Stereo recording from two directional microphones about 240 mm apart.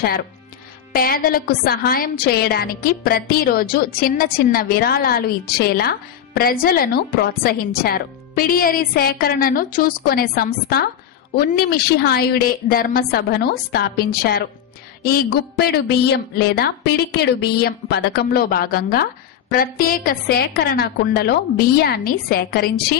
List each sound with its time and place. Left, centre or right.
0.9 s a woman's voice: left